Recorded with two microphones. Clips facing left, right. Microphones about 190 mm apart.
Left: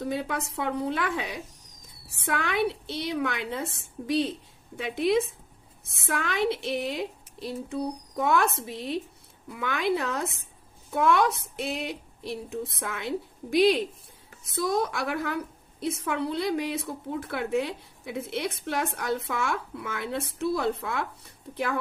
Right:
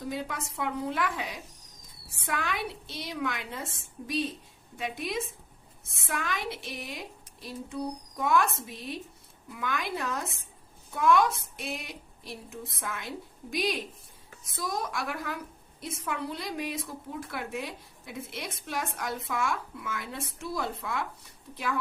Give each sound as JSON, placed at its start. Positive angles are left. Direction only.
{"t": 0.0, "sound": "a woman's voice", "side_deg": 65}